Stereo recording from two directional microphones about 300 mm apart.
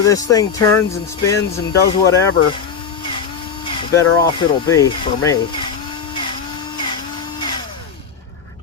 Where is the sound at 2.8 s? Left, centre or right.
Centre.